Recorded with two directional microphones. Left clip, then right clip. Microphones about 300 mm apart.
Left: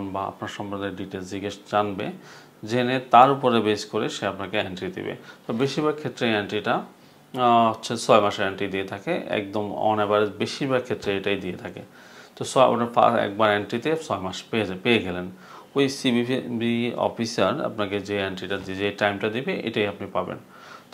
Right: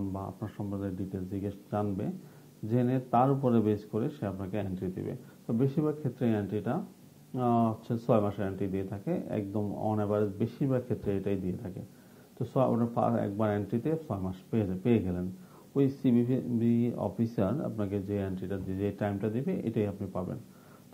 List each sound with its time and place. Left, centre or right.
0.0 s speech: centre
9.5 s speech: left
9.8 s speech: centre